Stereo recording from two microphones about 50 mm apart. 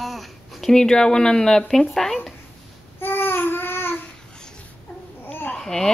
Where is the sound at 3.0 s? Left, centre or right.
Left.